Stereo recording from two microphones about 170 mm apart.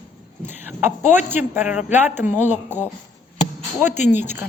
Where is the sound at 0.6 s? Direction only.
10° right (ahead or behind).